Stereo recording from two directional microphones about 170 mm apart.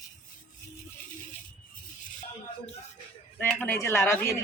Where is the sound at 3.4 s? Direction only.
10° left (ahead or behind).